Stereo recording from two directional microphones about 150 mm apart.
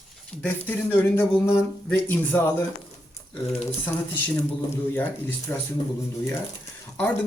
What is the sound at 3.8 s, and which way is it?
Speech, 10° left (ahead or behind).